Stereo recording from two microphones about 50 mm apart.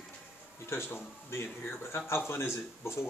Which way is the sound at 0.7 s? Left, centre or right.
Left.